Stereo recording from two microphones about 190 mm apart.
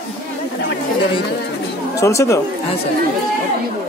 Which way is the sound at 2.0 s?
15° left (ahead or behind).